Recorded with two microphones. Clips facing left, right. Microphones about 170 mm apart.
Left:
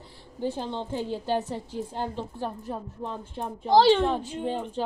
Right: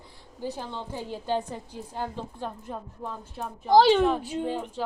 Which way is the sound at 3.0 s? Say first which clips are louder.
Left 2 dB; 25° left (ahead or behind).